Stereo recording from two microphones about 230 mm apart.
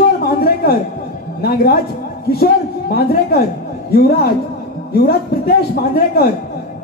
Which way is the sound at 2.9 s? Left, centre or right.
Left.